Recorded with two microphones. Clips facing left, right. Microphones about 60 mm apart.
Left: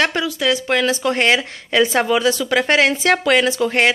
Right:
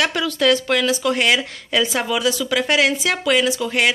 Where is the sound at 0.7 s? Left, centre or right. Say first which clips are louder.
Left 1 dB; left.